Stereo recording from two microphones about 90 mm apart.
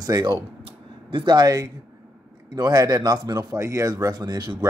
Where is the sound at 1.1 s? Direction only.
60° right (ahead or behind).